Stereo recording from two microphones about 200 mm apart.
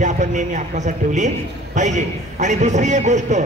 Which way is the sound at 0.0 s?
40° right (ahead or behind).